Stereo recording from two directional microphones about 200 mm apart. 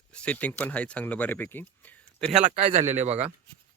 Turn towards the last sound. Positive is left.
turn(degrees=-35)  # may be behind; listen again after turning